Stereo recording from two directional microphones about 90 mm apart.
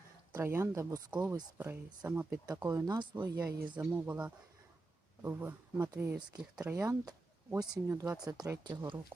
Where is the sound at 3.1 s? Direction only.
40° right (ahead or behind).